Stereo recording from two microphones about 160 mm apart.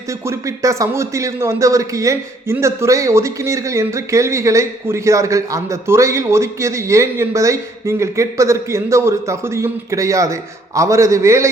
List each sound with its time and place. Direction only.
0.1 s a man's voice: 20° right (ahead or behind)